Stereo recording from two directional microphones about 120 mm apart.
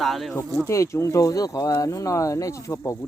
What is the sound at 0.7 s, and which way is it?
Speech, 25° left (ahead or behind).